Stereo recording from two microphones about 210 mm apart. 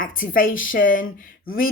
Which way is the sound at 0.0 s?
40° left (ahead or behind).